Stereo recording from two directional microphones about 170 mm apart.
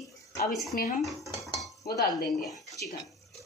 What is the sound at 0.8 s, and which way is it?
Speech, 55° left (ahead or behind).